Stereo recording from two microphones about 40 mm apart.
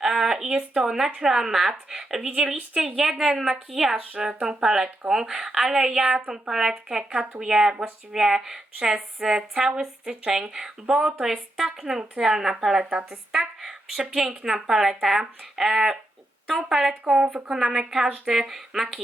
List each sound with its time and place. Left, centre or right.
0.0 s speech: centre
4.1 s speech: right
11.3 s a woman's voice: centre; by 18.3 s right
18.3 s speech: centre